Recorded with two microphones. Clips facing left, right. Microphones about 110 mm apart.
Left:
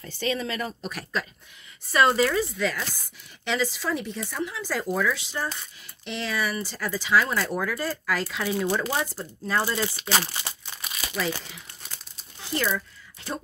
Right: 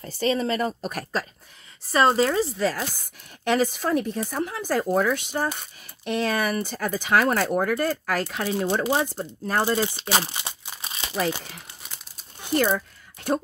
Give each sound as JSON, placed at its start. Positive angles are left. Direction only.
{"t": 0.0, "sound": "a woman's voice", "side_deg": -35}
{"t": 1.9, "sound": "speech", "side_deg": -30}
{"t": 8.6, "sound": "speech", "side_deg": -20}
{"t": 9.5, "sound": "speech", "side_deg": -50}
{"t": 10.0, "sound": "crumpling", "side_deg": -20}
{"t": 10.8, "sound": "crumpling", "side_deg": -30}
{"t": 12.4, "sound": "speech", "side_deg": -50}